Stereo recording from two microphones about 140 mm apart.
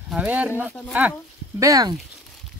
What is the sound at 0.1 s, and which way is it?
Speech, 10° right (ahead or behind).